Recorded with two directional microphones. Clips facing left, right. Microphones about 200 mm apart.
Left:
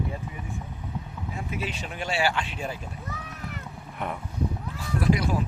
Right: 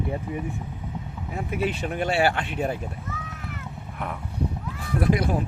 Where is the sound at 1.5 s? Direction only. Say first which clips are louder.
Right 9 dB; 60° right (ahead or behind).